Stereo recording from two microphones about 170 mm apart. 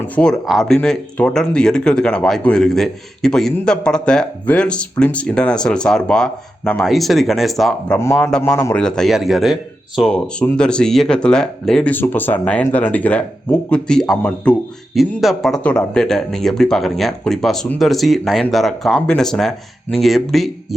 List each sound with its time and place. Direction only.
0.2 s speech: centre (ahead or behind)
7.9 s a man's voice: 15° left (ahead or behind)
8.3 s speech: 5° left (ahead or behind)